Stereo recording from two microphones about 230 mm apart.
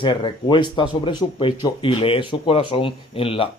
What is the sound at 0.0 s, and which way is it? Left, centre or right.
Speech, left.